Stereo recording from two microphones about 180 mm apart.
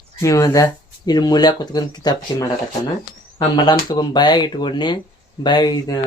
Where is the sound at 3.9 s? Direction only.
25° left (ahead or behind).